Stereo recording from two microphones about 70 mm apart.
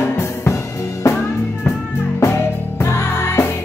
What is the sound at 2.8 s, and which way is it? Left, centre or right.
Music, left.